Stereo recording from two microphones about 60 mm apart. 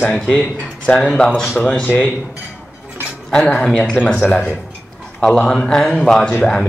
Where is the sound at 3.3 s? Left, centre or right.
Centre.